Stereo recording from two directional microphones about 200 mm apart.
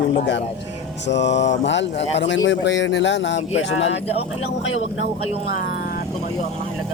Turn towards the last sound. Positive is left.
turn(degrees=80)